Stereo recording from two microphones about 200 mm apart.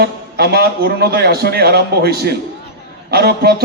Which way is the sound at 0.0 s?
55° right (ahead or behind).